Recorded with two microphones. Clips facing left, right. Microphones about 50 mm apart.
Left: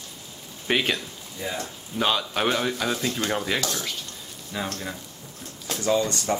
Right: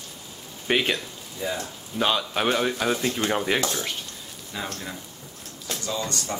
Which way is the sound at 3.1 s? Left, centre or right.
Centre.